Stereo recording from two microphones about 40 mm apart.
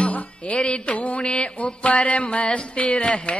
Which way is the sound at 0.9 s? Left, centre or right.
Left.